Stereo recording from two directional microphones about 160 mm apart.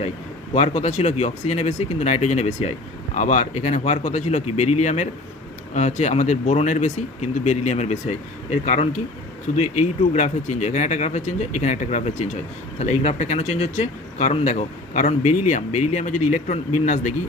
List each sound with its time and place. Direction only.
0.5 s speech: 45° left (ahead or behind)